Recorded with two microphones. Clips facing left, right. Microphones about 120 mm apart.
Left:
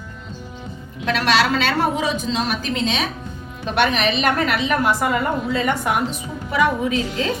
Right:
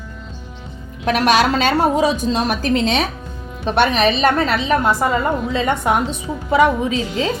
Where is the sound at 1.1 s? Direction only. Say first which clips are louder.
Right 3 dB; 40° right (ahead or behind).